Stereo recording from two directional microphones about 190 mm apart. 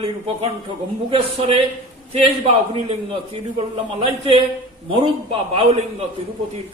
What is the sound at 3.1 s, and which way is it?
A man's voice, 30° right (ahead or behind).